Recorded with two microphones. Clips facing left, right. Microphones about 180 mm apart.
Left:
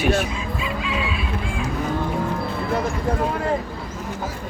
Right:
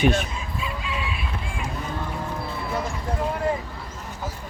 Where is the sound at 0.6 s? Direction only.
90° left.